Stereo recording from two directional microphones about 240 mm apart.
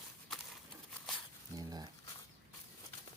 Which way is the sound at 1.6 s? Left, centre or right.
Centre.